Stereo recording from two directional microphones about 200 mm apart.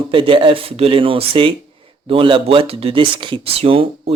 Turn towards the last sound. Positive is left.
turn(degrees=-30)  # may be behind; listen again after turning